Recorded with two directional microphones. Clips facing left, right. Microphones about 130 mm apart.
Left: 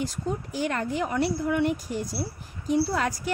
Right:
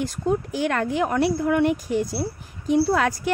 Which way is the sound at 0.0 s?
60° right (ahead or behind).